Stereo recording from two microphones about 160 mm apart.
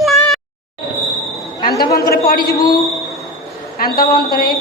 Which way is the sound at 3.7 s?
70° left (ahead or behind).